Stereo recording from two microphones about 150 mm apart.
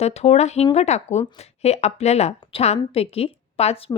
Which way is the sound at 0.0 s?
45° left (ahead or behind).